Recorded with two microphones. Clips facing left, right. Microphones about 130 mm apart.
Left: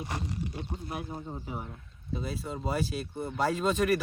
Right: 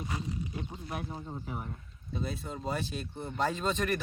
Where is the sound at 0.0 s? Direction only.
70° left (ahead or behind).